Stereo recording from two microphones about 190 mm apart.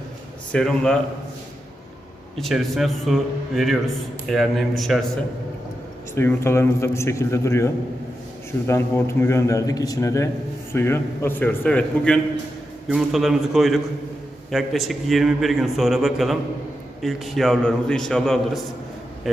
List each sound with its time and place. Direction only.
0.5 s a man's voice: 5° left (ahead or behind)
2.4 s a man's voice: centre (ahead or behind)
6.1 s a man's voice: 15° left (ahead or behind)